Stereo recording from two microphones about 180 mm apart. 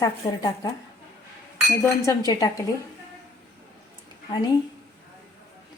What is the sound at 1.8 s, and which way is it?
Speech, 20° left (ahead or behind).